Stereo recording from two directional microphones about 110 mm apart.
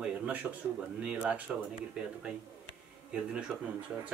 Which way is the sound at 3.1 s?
10° right (ahead or behind).